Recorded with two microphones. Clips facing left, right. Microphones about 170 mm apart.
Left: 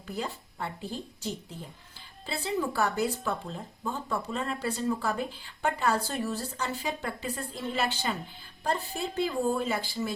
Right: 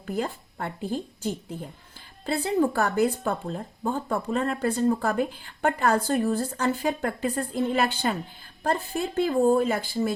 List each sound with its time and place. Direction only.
0.2 s a woman's voice: 55° right (ahead or behind)